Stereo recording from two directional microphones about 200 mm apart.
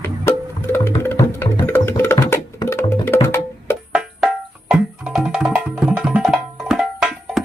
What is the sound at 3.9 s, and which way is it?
Music, 5° right (ahead or behind).